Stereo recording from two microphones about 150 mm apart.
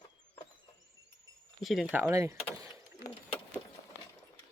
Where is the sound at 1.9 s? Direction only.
20° right (ahead or behind).